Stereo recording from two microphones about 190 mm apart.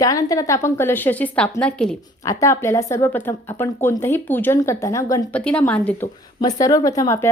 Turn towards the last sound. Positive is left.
turn(degrees=15)  # may be behind; listen again after turning